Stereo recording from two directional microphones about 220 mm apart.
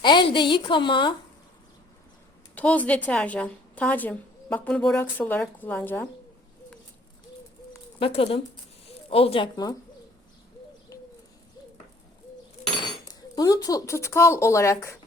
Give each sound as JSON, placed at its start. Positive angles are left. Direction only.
{"t": 0.0, "sound": "a woman's voice", "side_deg": 20}
{"t": 2.6, "sound": "a woman's voice", "side_deg": 5}
{"t": 7.9, "sound": "a woman's voice", "side_deg": 25}
{"t": 13.3, "sound": "a woman's voice", "side_deg": 15}